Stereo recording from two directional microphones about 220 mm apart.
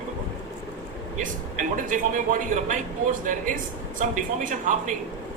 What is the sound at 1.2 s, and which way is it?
Speech, 35° right (ahead or behind).